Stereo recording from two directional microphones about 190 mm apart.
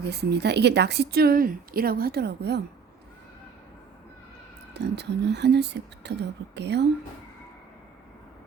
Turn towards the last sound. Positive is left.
turn(degrees=-65)  # may be behind; listen again after turning